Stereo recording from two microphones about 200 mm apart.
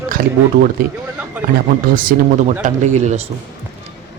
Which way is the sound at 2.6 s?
35° right (ahead or behind).